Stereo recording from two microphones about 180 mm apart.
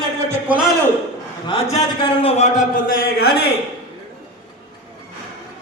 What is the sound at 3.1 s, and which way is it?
Speech, 60° left (ahead or behind).